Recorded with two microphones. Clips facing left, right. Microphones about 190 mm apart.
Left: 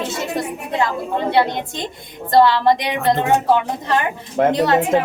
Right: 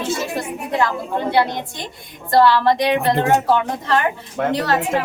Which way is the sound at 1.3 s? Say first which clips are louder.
Left 1 dB; 20° left (ahead or behind).